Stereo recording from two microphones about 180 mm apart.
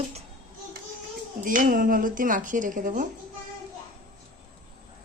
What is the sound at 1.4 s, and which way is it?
Speech, 50° right (ahead or behind).